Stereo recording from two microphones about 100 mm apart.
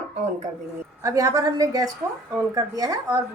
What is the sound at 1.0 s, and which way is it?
A woman's voice, 35° right (ahead or behind).